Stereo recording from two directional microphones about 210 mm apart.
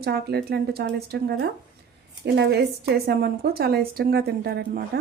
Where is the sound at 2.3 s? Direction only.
50° right (ahead or behind).